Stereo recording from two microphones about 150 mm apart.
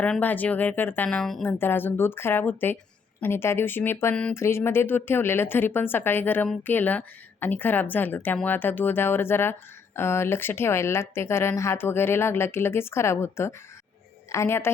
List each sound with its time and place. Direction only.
0.0 s a woman's voice: 10° left (ahead or behind)